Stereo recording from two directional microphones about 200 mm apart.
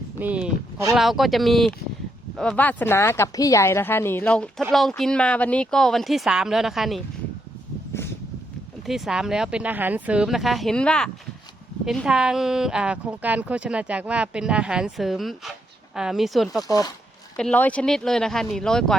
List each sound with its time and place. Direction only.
0.2 s a sound: 5° right (ahead or behind)
0.9 s a woman's voice: centre (ahead or behind)
7.9 s a sound: 15° left (ahead or behind)
8.9 s a woman's voice: centre (ahead or behind)
16.6 s speech: 15° left (ahead or behind)
17.3 s a woman's voice: 5° left (ahead or behind)